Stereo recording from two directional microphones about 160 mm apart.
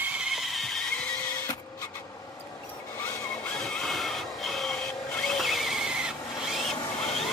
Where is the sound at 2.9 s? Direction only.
15° left (ahead or behind).